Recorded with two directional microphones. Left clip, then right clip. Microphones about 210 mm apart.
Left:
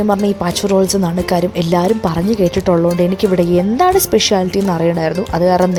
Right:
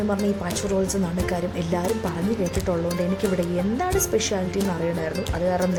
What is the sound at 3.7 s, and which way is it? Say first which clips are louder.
Speech: left 11 dB; 35° left (ahead or behind).